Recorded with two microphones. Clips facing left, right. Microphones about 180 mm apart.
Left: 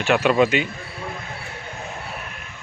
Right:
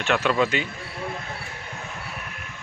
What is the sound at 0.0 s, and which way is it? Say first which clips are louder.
Speech: left 5 dB; 15° left (ahead or behind).